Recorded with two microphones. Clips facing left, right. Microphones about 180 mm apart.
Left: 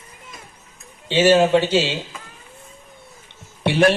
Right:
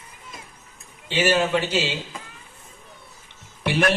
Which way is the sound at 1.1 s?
35° left (ahead or behind).